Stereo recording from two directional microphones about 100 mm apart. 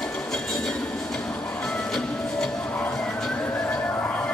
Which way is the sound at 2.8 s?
15° left (ahead or behind).